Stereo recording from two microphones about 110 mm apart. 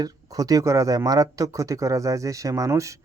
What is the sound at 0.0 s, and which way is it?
Speech, 35° right (ahead or behind).